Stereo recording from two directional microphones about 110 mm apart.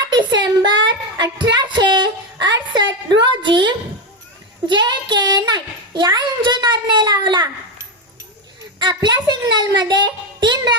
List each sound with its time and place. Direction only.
0.1 s child singing: 45° right (ahead or behind)
4.6 s a sound: 45° right (ahead or behind)
6.1 s a child's voice: 40° right (ahead or behind)
8.8 s a child's voice: 40° right (ahead or behind)